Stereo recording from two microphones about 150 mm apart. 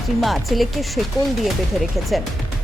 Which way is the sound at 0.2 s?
Centre (ahead or behind).